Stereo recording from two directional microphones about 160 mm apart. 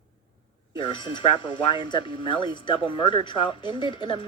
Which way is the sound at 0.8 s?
30° left (ahead or behind).